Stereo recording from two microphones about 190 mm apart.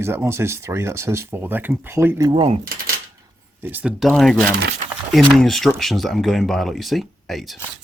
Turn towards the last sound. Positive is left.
turn(degrees=0)  # may be behind; listen again after turning